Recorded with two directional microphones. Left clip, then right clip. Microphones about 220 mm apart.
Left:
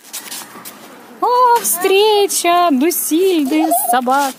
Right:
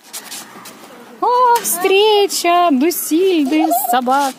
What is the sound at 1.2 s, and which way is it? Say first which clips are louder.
Speech: left 1 dB; centre (ahead or behind).